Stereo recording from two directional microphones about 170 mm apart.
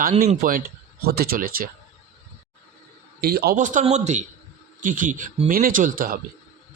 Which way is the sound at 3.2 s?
65° right (ahead or behind).